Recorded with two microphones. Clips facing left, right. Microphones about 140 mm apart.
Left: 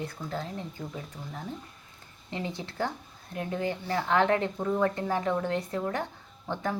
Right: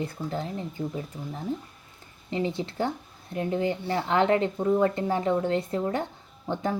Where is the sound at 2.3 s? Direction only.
30° right (ahead or behind).